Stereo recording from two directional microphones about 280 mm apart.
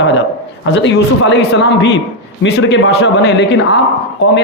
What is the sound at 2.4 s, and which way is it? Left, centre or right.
A man's voice, left.